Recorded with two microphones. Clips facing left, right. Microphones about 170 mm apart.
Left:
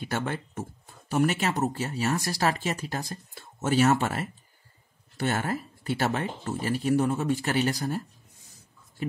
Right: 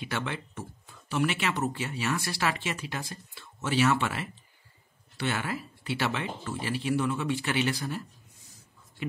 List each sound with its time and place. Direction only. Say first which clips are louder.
0.0 s speech: left 3 dB; 45° left (ahead or behind)